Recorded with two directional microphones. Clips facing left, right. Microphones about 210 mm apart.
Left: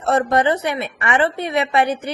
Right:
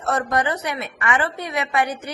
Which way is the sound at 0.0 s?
30° left (ahead or behind).